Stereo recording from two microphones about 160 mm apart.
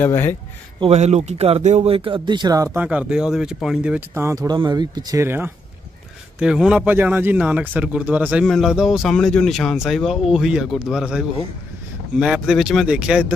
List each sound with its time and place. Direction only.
0.0 s speech: 15° left (ahead or behind)
0.7 s speech: 40° right (ahead or behind); by 2.8 s 20° right (ahead or behind)
2.8 s speech: 10° right (ahead or behind)
4.1 s a man's voice: 15° right (ahead or behind)